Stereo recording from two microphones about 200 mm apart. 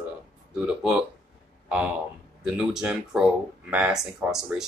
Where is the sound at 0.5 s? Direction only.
5° right (ahead or behind).